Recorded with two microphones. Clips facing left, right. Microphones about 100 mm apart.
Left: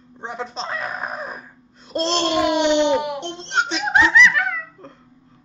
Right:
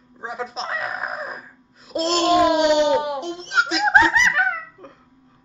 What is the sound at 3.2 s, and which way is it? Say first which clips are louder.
Speech: right 1 dB; 5° right (ahead or behind).